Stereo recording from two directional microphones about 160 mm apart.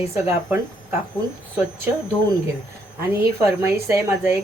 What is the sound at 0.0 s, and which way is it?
Speech, 15° right (ahead or behind).